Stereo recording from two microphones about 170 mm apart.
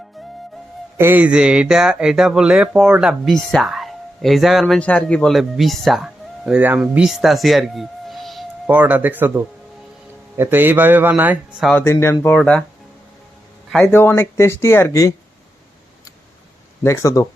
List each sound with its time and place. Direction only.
0.9 s a man's voice: 10° right (ahead or behind)
11.7 s speech: 15° left (ahead or behind)
13.8 s speech: 15° left (ahead or behind)
16.8 s speech: 15° left (ahead or behind)